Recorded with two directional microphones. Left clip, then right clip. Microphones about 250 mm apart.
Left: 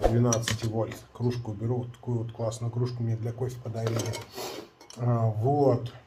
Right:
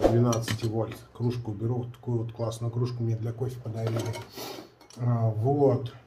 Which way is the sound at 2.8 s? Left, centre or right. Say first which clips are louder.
Left 1 dB; centre.